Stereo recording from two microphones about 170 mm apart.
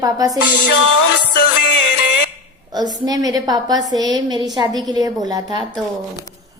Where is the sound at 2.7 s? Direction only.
25° right (ahead or behind).